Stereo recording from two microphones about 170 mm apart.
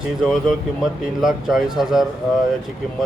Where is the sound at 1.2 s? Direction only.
Centre (ahead or behind).